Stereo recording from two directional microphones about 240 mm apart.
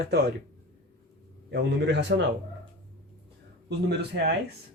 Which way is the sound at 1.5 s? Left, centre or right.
Right.